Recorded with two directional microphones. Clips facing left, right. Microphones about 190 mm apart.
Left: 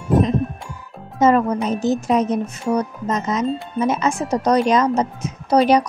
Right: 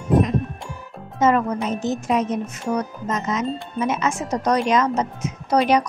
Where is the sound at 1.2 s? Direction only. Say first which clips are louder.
Left 3 dB; 35° left (ahead or behind).